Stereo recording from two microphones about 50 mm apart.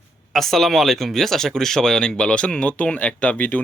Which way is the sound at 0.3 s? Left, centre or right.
Centre.